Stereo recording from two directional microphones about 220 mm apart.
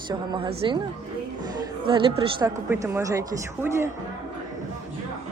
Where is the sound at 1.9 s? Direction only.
20° right (ahead or behind).